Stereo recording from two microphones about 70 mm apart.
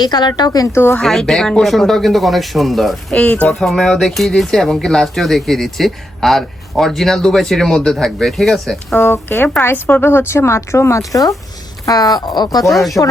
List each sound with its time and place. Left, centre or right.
0.0 s speech: left
0.7 s speech: left
1.0 s speech: centre
3.1 s speech: centre
3.5 s speech: centre
9.0 s speech: left
11.9 s speech: left
12.6 s speech: centre